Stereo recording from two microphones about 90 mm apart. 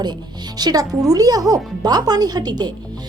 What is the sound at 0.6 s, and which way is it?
A woman's voice, 45° right (ahead or behind).